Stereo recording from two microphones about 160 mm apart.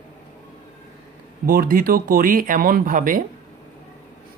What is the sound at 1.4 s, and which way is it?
Speech, 65° right (ahead or behind).